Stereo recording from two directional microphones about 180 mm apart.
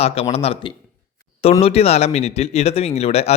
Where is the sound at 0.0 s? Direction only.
35° left (ahead or behind).